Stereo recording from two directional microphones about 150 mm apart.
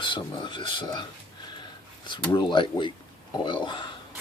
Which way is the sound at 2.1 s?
30° left (ahead or behind).